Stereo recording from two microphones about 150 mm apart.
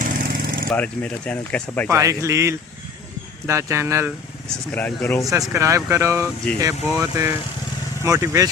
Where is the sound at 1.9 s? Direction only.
20° right (ahead or behind).